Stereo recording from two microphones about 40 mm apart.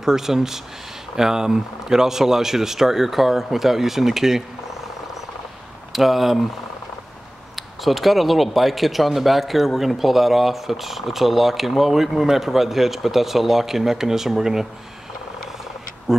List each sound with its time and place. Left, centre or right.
0.0 s speech: centre
5.9 s speech: centre
7.5 s speech: centre
16.1 s speech: centre